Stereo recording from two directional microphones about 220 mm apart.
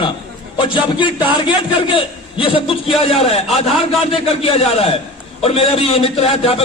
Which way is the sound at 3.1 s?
25° left (ahead or behind).